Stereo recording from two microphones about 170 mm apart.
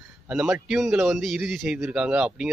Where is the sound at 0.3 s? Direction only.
5° right (ahead or behind).